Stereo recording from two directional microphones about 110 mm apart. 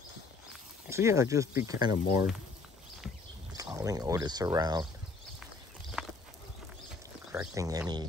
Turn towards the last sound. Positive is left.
turn(degrees=-30)  # may be behind; listen again after turning